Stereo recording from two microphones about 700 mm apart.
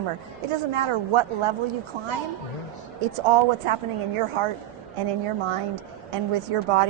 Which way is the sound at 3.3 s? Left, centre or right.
Right.